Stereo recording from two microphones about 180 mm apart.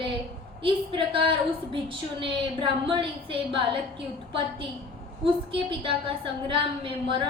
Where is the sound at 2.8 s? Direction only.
30° right (ahead or behind).